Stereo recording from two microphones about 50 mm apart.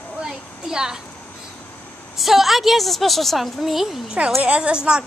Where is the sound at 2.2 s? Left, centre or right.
Centre.